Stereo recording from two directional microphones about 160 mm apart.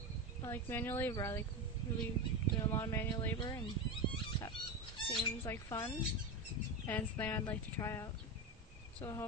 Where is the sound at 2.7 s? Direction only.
15° left (ahead or behind).